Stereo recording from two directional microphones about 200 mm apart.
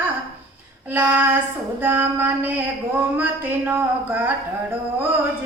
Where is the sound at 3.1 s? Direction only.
10° right (ahead or behind).